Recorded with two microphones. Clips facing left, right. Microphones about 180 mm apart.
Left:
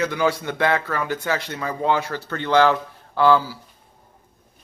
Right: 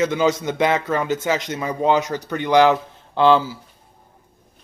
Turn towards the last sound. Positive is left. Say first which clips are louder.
# right 2 dB
turn(degrees=-20)  # may be behind; listen again after turning